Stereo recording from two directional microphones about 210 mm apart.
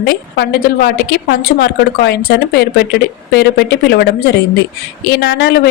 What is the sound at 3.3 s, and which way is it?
A woman's voice, 55° left (ahead or behind).